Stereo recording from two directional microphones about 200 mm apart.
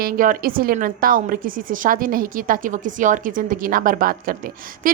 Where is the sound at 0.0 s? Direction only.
45° right (ahead or behind).